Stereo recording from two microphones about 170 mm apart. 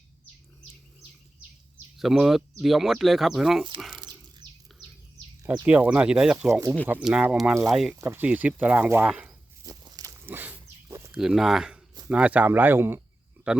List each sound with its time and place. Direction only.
2.0 s speech: centre (ahead or behind)
3.8 s a sound: 5° right (ahead or behind)
4.0 s a sound: 25° right (ahead or behind)
5.6 s speech: 10° right (ahead or behind)
6.5 s speech: 20° right (ahead or behind)
6.8 s speech: 10° right (ahead or behind)
7.9 s speech: 15° right (ahead or behind)
9.6 s a sound: 25° right (ahead or behind)
11.1 s speech: 5° right (ahead or behind)